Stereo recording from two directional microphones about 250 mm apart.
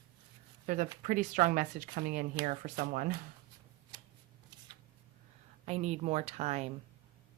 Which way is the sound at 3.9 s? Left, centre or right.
Centre.